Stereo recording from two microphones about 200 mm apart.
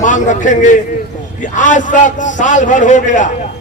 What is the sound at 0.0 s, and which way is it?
A man's voice, 40° left (ahead or behind).